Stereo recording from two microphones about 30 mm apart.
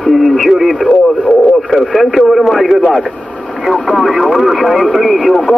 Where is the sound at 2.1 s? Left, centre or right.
Centre.